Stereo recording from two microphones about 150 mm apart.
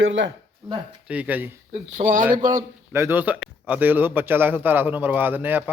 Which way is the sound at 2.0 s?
55° right (ahead or behind).